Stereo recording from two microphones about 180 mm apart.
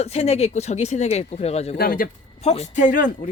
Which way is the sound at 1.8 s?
50° left (ahead or behind).